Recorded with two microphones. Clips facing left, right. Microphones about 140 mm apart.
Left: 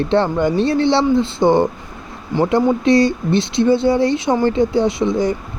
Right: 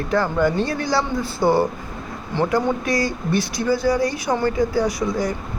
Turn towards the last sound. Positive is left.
turn(degrees=25)  # may be behind; listen again after turning